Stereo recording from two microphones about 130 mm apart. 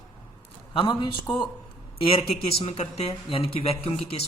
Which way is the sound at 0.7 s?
40° left (ahead or behind).